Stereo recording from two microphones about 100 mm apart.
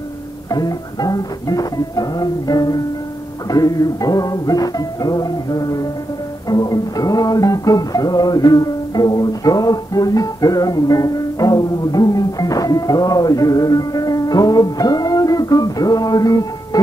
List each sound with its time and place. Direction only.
0.5 s music: 40° left (ahead or behind)